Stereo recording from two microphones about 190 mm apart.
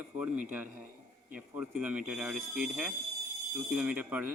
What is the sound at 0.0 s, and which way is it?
Speech, 10° right (ahead or behind).